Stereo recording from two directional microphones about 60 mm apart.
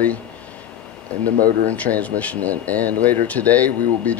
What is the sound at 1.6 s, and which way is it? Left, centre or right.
Speech, left.